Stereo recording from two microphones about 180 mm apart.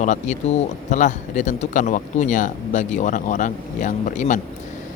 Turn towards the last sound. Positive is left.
turn(degrees=45)  # may be behind; listen again after turning